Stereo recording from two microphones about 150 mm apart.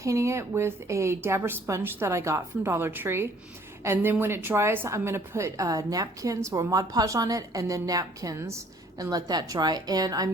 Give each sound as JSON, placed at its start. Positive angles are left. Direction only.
{"t": 0.0, "sound": "a woman's voice", "side_deg": -20}